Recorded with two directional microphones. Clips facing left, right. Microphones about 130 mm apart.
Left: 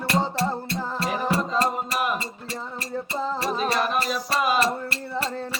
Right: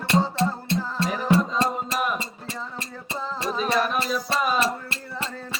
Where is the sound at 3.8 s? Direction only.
Centre (ahead or behind).